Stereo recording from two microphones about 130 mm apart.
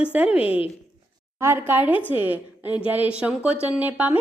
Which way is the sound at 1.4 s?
15° right (ahead or behind).